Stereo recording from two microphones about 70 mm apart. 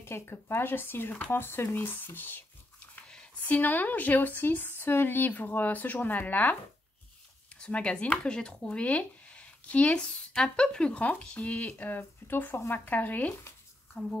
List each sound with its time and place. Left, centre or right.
0.0 s speech: left
3.4 s speech: left
7.5 s speech: centre